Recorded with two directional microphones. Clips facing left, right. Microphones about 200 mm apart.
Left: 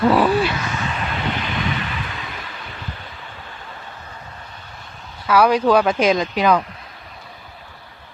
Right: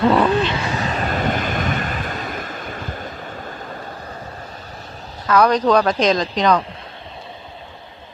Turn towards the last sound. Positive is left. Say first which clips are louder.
# even
turn(degrees=5)  # may be behind; listen again after turning